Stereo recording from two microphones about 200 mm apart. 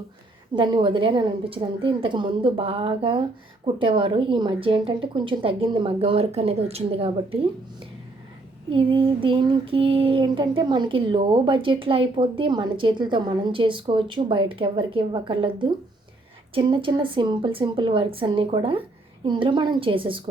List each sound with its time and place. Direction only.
0.5 s child singing: 25° right (ahead or behind)
8.7 s child singing: 25° right (ahead or behind)